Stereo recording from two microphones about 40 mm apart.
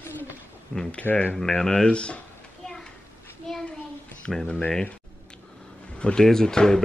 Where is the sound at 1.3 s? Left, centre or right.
Centre.